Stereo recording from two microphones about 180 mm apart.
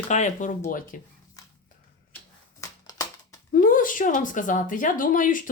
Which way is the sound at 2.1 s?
20° left (ahead or behind).